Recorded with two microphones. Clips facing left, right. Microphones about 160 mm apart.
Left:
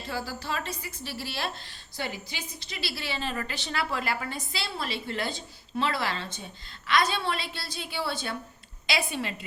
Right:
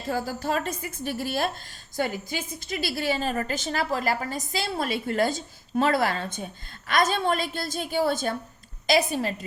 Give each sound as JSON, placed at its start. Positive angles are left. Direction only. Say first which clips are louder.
{"t": 0.1, "sound": "a woman's voice", "louder": "right 7 dB", "side_deg": -50}